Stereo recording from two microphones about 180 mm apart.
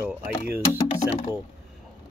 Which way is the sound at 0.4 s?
35° left (ahead or behind).